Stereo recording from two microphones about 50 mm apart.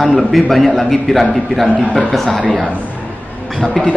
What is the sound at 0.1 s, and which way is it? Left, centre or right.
A man's voice, centre.